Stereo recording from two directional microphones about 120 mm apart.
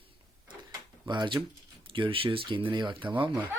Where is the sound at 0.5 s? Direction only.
35° right (ahead or behind).